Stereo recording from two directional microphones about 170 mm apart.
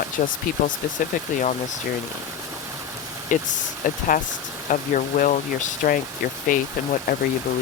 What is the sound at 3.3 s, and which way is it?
Speech, 50° left (ahead or behind).